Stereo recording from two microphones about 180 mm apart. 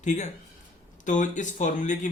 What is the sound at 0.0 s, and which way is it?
A man's voice, 40° left (ahead or behind).